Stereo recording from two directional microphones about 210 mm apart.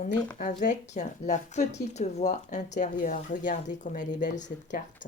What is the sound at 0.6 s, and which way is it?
Speech, 35° left (ahead or behind).